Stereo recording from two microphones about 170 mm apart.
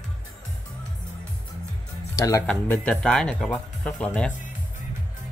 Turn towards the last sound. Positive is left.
turn(degrees=5)  # may be behind; listen again after turning